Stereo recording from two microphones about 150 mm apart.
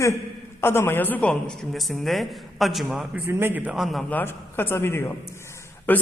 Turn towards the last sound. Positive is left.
turn(degrees=15)  # may be behind; listen again after turning